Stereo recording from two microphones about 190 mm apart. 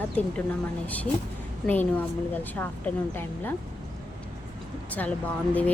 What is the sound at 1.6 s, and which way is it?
Speech, 10° left (ahead or behind).